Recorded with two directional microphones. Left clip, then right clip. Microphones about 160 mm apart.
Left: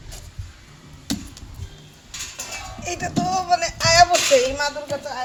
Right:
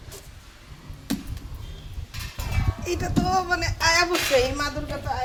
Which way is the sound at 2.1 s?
15° left (ahead or behind).